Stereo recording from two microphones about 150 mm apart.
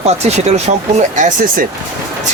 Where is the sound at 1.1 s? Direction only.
60° right (ahead or behind).